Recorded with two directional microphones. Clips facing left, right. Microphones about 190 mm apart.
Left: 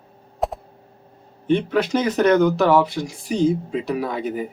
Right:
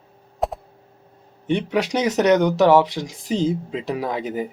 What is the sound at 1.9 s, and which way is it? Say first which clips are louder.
Speech: even; 15° right (ahead or behind).